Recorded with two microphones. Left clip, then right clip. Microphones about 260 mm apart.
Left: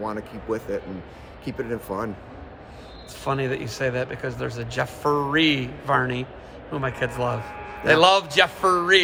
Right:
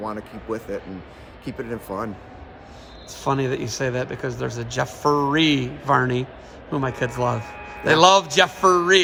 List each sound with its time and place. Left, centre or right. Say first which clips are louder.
0.0 s speech: even; centre
3.2 s speech: right 3 dB; right